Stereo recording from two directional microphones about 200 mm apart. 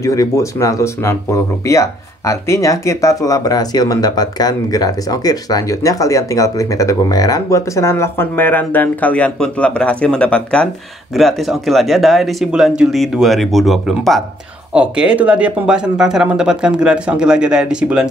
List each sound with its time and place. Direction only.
0.0 s speech: 15° left (ahead or behind); by 18.0 s 5° right (ahead or behind)